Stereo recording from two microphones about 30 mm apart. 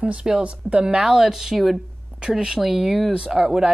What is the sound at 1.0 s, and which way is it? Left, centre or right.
Speech, centre.